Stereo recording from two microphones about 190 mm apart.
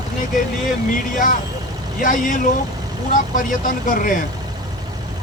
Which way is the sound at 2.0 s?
45° left (ahead or behind).